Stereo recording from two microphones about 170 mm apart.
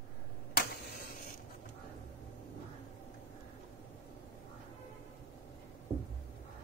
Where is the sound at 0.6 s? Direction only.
65° left (ahead or behind).